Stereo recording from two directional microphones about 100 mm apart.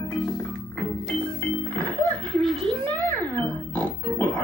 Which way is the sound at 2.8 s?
20° left (ahead or behind).